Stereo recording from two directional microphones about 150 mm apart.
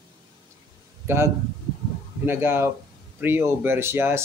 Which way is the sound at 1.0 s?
15° right (ahead or behind).